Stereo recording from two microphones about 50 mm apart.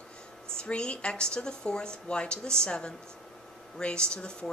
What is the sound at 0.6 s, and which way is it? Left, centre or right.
A woman's voice, centre.